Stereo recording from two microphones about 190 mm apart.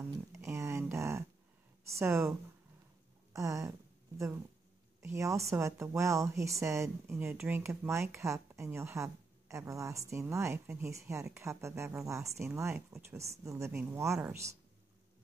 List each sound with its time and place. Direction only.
0.0 s a sound: 15° right (ahead or behind)
2.0 s speech: 15° right (ahead or behind)
3.3 s speech: 15° right (ahead or behind)
5.0 s speech: 15° right (ahead or behind)